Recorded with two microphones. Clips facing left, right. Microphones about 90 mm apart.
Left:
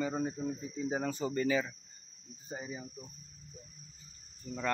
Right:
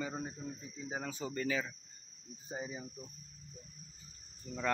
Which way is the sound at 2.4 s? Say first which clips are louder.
Even; 10° right (ahead or behind).